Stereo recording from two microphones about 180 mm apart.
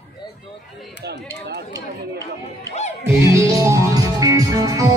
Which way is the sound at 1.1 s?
65° right (ahead or behind).